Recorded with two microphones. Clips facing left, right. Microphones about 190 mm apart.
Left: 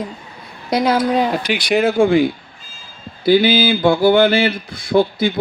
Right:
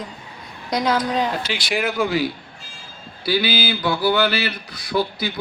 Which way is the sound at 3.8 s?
50° left (ahead or behind).